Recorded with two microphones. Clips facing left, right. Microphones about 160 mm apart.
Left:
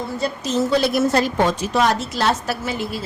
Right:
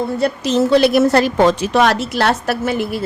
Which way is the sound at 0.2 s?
75° right (ahead or behind).